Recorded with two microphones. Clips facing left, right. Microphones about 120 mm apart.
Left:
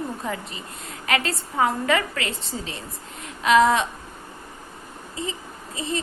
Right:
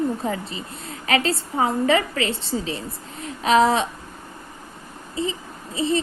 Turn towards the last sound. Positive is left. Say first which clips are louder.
# right 6 dB
turn(degrees=-30)  # may be behind; listen again after turning